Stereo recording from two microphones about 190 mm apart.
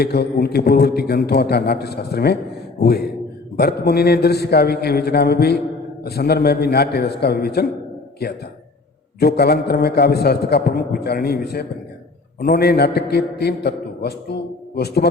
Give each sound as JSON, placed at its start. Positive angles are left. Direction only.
{"t": 0.0, "sound": "a man's voice", "side_deg": 55}